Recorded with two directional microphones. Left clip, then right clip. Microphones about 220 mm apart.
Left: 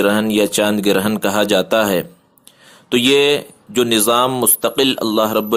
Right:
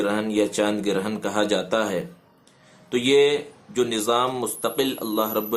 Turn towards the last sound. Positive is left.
turn(degrees=40)  # may be behind; listen again after turning